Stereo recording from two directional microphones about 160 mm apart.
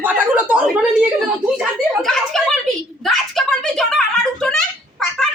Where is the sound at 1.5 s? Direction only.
Centre (ahead or behind).